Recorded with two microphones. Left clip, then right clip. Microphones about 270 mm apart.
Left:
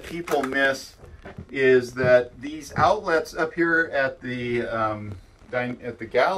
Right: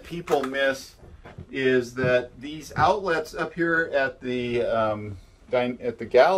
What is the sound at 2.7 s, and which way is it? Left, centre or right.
Speech, centre.